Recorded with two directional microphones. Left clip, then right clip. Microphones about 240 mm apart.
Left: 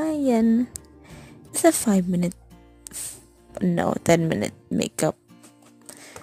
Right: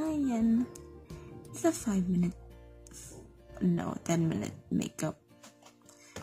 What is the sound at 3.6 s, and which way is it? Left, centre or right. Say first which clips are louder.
Speech: left 11 dB; left.